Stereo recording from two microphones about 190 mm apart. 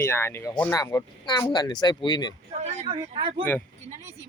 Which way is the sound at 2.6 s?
35° right (ahead or behind).